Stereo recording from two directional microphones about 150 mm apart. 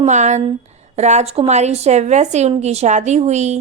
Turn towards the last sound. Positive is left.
turn(degrees=-50)  # may be behind; listen again after turning